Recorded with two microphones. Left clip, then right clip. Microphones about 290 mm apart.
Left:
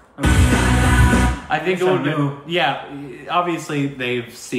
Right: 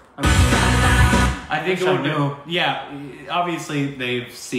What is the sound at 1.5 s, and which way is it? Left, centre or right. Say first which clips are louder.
A man's voice: left 3 dB; centre.